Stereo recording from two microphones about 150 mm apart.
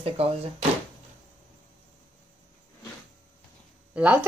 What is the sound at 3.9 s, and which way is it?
Speech, 10° right (ahead or behind).